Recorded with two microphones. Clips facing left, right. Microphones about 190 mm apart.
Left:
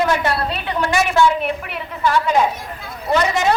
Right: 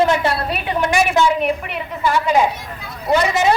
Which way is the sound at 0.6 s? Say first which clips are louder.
Right 3 dB; 20° right (ahead or behind).